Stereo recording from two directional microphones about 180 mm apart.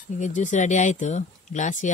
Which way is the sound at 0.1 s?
45° left (ahead or behind).